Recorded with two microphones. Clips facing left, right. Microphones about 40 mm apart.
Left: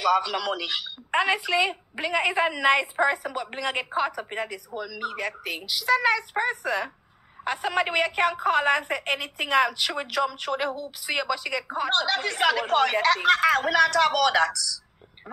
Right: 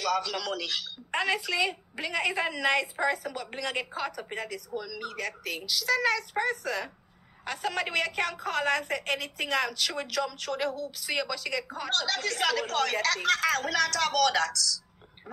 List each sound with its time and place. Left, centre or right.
0.0 s a woman's voice: centre